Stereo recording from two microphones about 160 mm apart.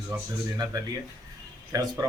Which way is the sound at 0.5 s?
25° right (ahead or behind).